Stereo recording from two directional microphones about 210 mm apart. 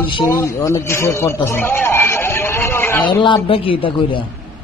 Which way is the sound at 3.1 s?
25° left (ahead or behind).